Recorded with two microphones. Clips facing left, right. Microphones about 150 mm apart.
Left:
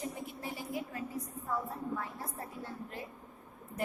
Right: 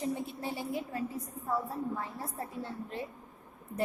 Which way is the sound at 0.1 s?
30° right (ahead or behind).